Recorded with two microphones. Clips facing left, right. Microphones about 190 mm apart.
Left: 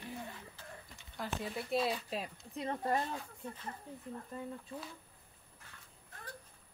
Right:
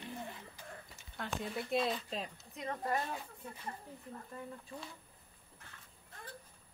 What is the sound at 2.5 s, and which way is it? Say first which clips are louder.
Speech: left 2 dB; 30° left (ahead or behind).